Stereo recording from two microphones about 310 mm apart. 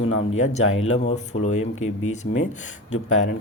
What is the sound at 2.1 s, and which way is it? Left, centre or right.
Speech, left.